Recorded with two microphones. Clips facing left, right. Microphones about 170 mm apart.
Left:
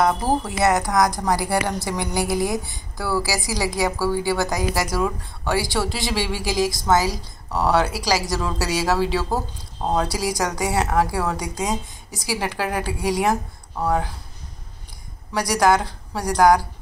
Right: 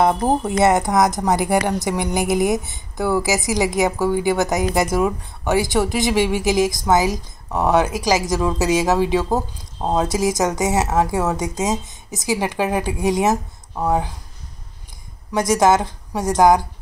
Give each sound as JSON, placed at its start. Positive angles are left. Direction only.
{"t": 0.0, "sound": "speech", "side_deg": -25}
{"t": 15.3, "sound": "speech", "side_deg": -20}